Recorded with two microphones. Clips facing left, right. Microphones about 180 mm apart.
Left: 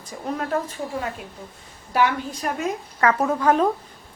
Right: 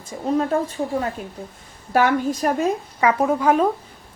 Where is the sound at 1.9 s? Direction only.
45° right (ahead or behind).